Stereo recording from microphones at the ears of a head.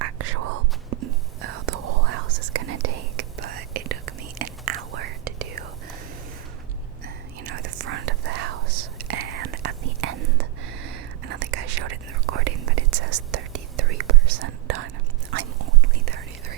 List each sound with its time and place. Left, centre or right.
0.0 s whispering: right
7.4 s whispering: right